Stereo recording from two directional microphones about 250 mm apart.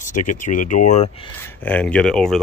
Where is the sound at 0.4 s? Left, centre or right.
Left.